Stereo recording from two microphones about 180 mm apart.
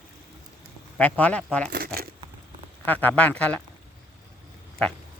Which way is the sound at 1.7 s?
55° right (ahead or behind).